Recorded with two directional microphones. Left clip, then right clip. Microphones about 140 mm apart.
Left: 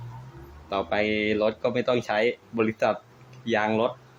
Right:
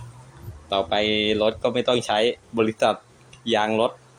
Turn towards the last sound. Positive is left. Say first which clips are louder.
# right 3 dB
turn(degrees=-10)  # may be behind; listen again after turning